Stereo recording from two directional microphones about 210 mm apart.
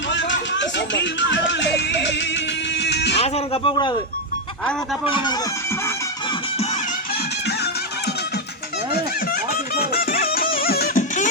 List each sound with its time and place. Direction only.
0.1 s a sound: 60° left (ahead or behind)
0.5 s music: 55° left (ahead or behind)
3.2 s speech: 30° left (ahead or behind)
5.0 s speech: 20° left (ahead or behind)
9.3 s music: 45° left (ahead or behind)